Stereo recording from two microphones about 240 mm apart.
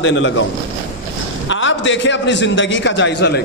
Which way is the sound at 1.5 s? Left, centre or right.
Left.